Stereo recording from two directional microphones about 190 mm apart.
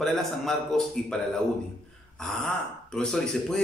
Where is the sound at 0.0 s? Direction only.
Centre (ahead or behind).